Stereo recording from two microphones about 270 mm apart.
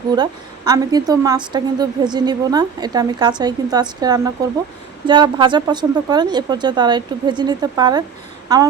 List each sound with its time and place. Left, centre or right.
0.2 s a woman's voice: centre